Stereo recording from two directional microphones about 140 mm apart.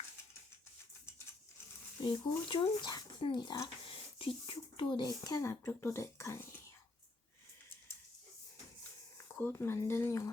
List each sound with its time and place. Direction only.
2.0 s speech: 35° left (ahead or behind); by 6.6 s 15° left (ahead or behind)
9.1 s speech: 15° left (ahead or behind)